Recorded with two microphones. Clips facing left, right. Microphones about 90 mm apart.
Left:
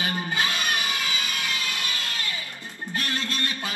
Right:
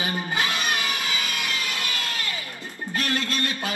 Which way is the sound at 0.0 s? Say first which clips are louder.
Right 1 dB; 20° right (ahead or behind).